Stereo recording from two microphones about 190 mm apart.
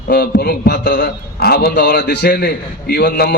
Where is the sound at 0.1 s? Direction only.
55° left (ahead or behind).